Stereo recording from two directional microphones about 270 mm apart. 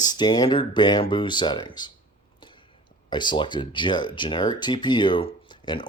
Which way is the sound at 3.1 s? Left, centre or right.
Centre.